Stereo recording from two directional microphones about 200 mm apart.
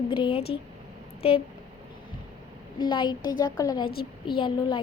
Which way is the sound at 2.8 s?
20° left (ahead or behind).